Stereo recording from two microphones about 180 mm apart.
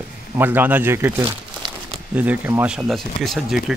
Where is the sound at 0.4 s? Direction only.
10° right (ahead or behind).